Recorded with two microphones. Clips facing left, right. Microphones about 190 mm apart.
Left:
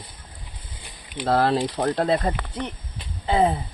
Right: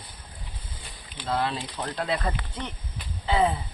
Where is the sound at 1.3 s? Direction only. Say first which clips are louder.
Left 8 dB; 65° left (ahead or behind).